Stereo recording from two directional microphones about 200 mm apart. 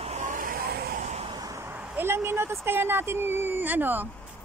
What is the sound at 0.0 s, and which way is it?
Vehicle, 35° right (ahead or behind).